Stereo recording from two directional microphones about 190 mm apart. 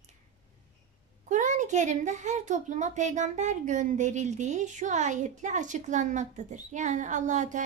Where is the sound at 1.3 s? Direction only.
40° right (ahead or behind).